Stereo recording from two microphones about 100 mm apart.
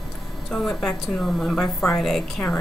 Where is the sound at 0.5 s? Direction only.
5° left (ahead or behind).